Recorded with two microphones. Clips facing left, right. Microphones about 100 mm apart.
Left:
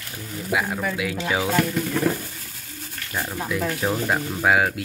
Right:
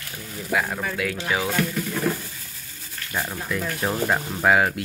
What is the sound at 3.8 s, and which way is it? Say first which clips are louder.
Speech: even; centre (ahead or behind).